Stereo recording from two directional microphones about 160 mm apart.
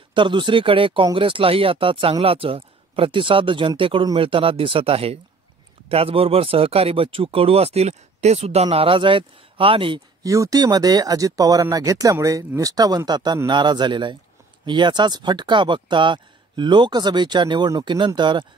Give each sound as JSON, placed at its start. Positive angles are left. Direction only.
{"t": 0.1, "sound": "speech", "side_deg": -30}
{"t": 10.2, "sound": "speech", "side_deg": -20}